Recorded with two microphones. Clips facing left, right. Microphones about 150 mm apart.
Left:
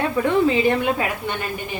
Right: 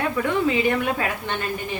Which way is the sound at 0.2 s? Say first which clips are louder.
Left 5 dB; 30° left (ahead or behind).